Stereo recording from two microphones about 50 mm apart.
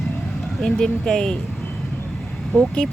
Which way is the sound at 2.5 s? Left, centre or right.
Centre.